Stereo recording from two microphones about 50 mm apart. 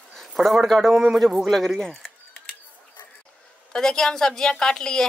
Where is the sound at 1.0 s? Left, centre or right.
Centre.